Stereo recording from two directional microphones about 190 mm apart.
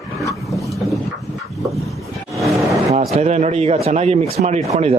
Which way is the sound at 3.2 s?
35° right (ahead or behind).